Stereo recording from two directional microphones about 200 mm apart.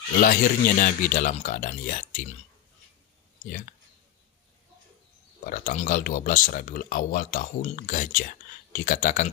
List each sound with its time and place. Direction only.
0.2 s speech: 45° left (ahead or behind)
3.4 s speech: 45° left (ahead or behind)
5.4 s speech: 45° left (ahead or behind)